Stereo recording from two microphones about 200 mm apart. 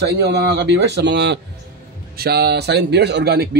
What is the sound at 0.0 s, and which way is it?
A man's voice, 55° right (ahead or behind).